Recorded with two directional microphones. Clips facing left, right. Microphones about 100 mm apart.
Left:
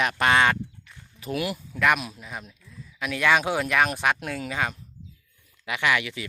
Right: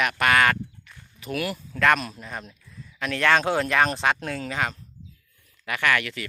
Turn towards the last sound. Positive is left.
turn(degrees=15)  # may be behind; listen again after turning